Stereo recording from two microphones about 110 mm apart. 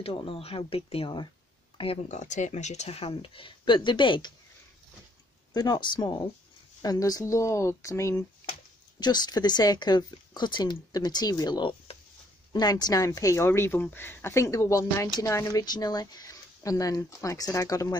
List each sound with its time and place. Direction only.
0.0 s speech: 55° left (ahead or behind)
2.0 s speech: 90° left; by 4.3 s 45° left (ahead or behind)
5.5 s speech: 40° left (ahead or behind)
9.0 s speech: 40° left (ahead or behind)